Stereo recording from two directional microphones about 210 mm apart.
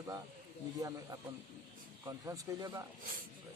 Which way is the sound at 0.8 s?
15° right (ahead or behind).